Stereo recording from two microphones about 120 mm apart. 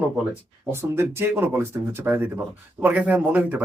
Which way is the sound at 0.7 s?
20° right (ahead or behind).